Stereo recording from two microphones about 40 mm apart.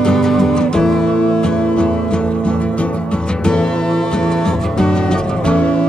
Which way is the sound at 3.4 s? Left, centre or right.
Left.